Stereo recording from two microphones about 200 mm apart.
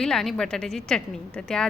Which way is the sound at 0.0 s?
Centre (ahead or behind).